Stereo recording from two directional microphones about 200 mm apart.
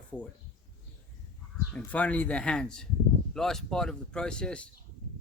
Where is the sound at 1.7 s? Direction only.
5° left (ahead or behind).